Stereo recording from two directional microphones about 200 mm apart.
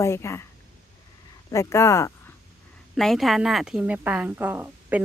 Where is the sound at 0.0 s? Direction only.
15° left (ahead or behind).